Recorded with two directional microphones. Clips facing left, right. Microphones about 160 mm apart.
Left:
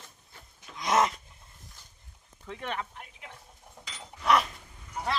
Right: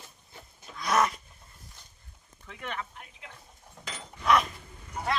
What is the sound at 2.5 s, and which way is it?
Speech, 30° left (ahead or behind).